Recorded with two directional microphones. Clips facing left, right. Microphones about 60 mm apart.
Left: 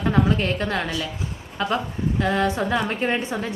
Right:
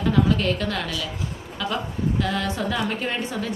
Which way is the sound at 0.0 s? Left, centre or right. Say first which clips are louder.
Even; left.